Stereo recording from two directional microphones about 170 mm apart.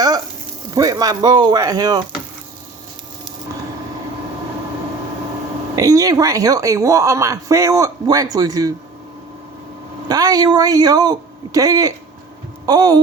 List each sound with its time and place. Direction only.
0.7 s speech: 20° right (ahead or behind)
5.7 s speech: 20° right (ahead or behind)
10.1 s speech: 25° right (ahead or behind)